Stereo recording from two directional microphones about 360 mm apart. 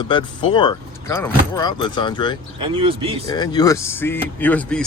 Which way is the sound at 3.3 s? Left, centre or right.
Centre.